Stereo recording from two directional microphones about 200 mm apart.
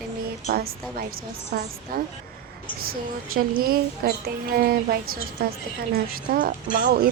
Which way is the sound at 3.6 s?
50° right (ahead or behind).